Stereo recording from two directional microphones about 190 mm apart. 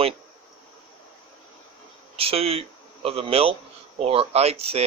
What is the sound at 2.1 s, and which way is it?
Speech, 30° right (ahead or behind).